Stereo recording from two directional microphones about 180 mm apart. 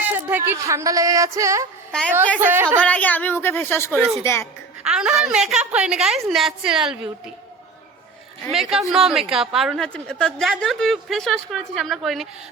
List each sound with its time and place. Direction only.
0.0 s speech: 10° right (ahead or behind)
1.9 s a woman's voice: 5° left (ahead or behind)
2.4 s a woman's voice: 10° right (ahead or behind)
2.8 s a woman's voice: 10° left (ahead or behind)
4.8 s a woman's voice: 5° right (ahead or behind)
8.9 s a woman's voice: 5° right (ahead or behind)